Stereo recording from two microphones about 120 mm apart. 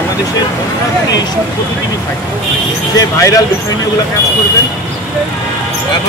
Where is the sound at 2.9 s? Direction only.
30° left (ahead or behind).